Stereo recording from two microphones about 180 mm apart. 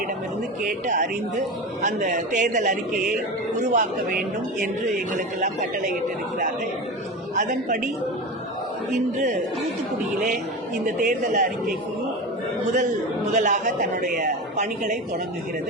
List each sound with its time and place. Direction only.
0.6 s a woman's voice: 45° right (ahead or behind)
7.3 s a woman's voice: 45° right (ahead or behind)
10.8 s a woman's voice: 50° right (ahead or behind)
13.3 s a woman's voice: 45° right (ahead or behind)